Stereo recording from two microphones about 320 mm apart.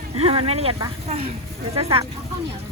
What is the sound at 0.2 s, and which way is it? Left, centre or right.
Speech, centre.